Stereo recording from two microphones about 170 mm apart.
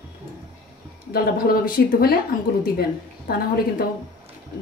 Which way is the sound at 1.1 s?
60° left (ahead or behind).